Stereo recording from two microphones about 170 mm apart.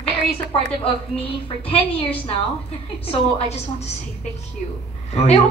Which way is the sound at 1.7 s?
35° left (ahead or behind).